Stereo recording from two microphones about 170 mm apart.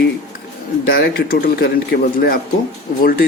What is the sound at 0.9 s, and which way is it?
Speech, 65° left (ahead or behind).